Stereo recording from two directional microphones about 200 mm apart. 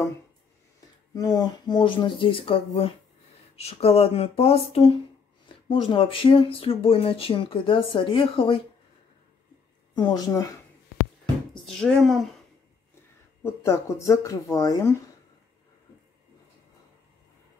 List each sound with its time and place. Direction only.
1.1 s speech: 20° left (ahead or behind)
9.9 s speech: 20° left (ahead or behind)
11.5 s speech: centre (ahead or behind)
13.4 s speech: 15° left (ahead or behind)